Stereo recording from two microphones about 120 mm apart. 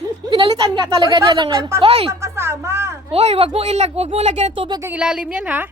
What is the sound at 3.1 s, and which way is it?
Speech, 60° right (ahead or behind).